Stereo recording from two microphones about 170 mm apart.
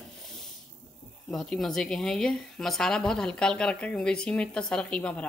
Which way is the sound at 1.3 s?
Centre (ahead or behind).